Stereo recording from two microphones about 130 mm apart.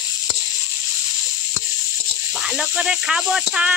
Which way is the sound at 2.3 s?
5° right (ahead or behind).